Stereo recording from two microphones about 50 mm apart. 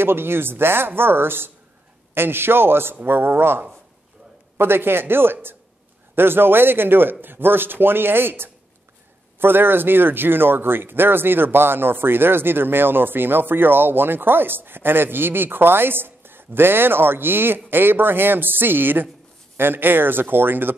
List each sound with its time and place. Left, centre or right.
0.0 s speech: right